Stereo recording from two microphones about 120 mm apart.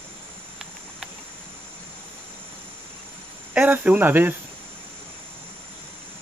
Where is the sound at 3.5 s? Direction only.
15° right (ahead or behind).